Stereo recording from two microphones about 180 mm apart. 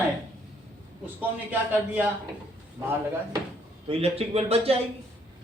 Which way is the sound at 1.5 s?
10° right (ahead or behind).